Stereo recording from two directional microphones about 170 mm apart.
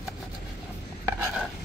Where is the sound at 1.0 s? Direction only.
5° right (ahead or behind).